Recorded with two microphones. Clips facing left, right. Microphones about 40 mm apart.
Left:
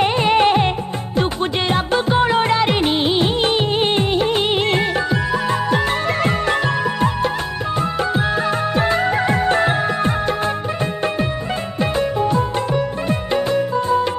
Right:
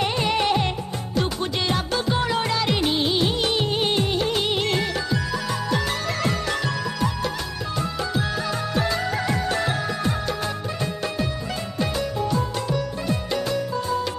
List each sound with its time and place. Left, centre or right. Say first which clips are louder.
0.0 s music: left 8 dB; left
1.7 s music of bollywood: left 7 dB; left
6.2 s music: left 5 dB; left
8.1 s music: left 7 dB; left
11.8 s music: left 7 dB; left